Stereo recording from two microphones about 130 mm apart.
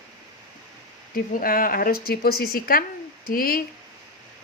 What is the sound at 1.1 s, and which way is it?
Speech, 90° left.